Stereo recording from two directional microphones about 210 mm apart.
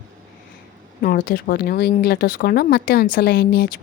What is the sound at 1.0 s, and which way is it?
Speech, 45° left (ahead or behind).